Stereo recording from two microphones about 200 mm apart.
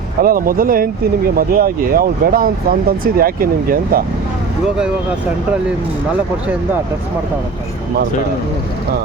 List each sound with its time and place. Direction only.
0.2 s speech: 45° right (ahead or behind)